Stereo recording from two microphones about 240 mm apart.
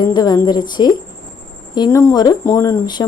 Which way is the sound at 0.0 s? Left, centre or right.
Centre.